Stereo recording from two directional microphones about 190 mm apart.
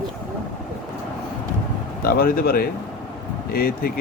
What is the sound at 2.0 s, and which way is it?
Speech, 50° left (ahead or behind).